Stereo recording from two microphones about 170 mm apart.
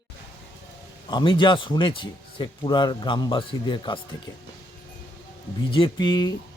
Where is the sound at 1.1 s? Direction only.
25° left (ahead or behind).